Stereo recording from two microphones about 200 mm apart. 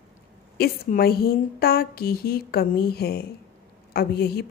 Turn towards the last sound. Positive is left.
turn(degrees=50)  # may be behind; listen again after turning